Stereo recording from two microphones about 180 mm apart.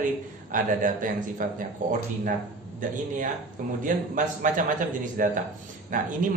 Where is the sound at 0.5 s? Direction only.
50° right (ahead or behind).